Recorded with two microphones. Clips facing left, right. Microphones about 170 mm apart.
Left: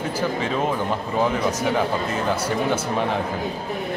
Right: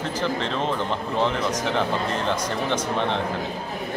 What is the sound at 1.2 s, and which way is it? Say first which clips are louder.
Speech: left 2 dB; 10° left (ahead or behind).